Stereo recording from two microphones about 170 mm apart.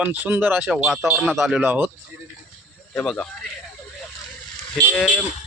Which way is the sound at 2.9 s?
10° left (ahead or behind).